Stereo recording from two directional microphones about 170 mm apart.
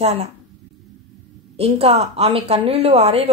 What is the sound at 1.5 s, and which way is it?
Speech, 35° right (ahead or behind).